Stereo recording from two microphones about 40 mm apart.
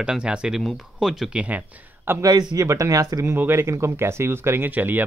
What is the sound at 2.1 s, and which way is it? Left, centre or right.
Speech, right.